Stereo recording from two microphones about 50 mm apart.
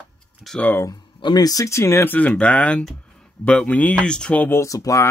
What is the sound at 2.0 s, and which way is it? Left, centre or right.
Speech, left.